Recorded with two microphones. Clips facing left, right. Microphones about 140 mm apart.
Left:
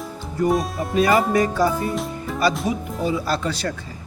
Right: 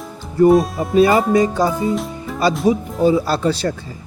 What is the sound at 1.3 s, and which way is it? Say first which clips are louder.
Speech: right 3 dB; 20° right (ahead or behind).